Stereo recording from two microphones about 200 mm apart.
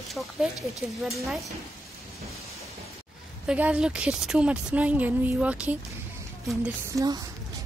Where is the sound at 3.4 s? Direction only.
5° right (ahead or behind).